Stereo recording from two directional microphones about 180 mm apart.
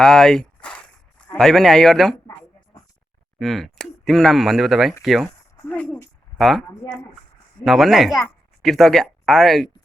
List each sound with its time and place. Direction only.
0.0 s a man's voice: centre (ahead or behind)
3.3 s speech: centre (ahead or behind)
5.0 s a sound: centre (ahead or behind)
7.6 s speech: centre (ahead or behind)